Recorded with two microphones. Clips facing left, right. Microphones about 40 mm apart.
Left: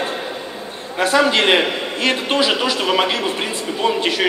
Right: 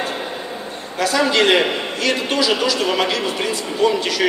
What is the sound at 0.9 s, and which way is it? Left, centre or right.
A man's voice, left.